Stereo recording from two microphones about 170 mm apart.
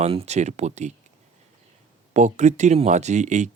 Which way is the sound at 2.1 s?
45° right (ahead or behind).